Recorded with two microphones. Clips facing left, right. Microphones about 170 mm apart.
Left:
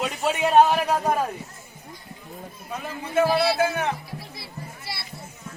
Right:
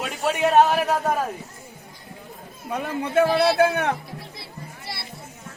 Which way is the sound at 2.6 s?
65° right (ahead or behind).